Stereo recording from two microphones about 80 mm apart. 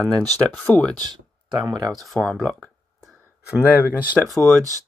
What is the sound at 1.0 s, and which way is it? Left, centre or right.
Speech, right.